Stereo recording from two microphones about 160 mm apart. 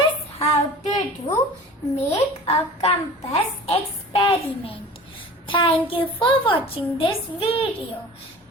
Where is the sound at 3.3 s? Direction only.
35° left (ahead or behind).